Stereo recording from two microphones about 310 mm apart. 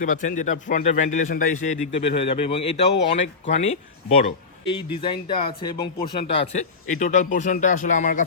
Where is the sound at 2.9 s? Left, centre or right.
Left.